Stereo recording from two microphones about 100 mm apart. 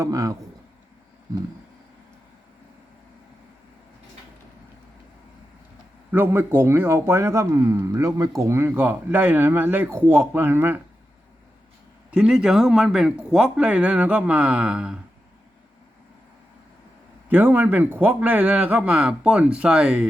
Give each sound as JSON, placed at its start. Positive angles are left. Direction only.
{"t": 0.0, "sound": "speech", "side_deg": -35}
{"t": 6.1, "sound": "speech", "side_deg": -20}
{"t": 12.1, "sound": "speech", "side_deg": -10}
{"t": 17.2, "sound": "speech", "side_deg": -20}